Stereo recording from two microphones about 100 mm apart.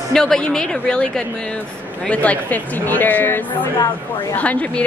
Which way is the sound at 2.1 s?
15° left (ahead or behind).